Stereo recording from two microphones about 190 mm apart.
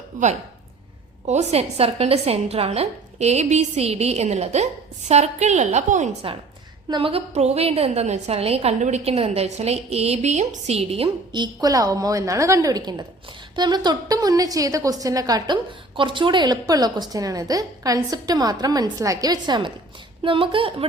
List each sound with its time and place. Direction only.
0.1 s a woman's voice: 40° right (ahead or behind)
6.8 s a woman's voice: 25° right (ahead or behind)